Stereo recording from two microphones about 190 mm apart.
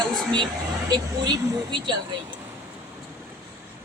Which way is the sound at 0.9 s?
20° right (ahead or behind).